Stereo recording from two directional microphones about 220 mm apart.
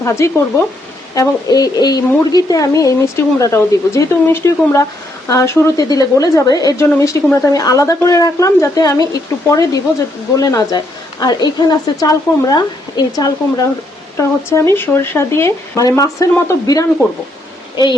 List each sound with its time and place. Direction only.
0.0 s speech: 10° left (ahead or behind)